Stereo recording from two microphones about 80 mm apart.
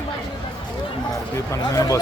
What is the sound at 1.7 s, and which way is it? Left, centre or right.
Speech, left.